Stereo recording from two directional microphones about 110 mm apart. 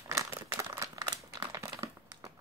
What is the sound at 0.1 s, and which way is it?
Crumpling, 25° right (ahead or behind).